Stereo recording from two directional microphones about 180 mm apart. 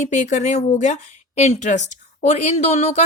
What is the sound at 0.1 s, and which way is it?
A woman's voice, 40° left (ahead or behind).